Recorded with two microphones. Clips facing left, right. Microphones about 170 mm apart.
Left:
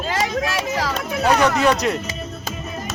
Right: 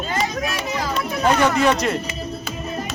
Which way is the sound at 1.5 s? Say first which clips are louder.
Even; centre (ahead or behind).